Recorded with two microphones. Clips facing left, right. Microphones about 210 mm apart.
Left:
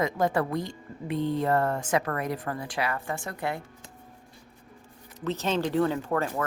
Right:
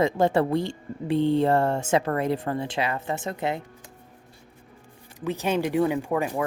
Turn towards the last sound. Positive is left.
turn(degrees=-15)  # may be behind; listen again after turning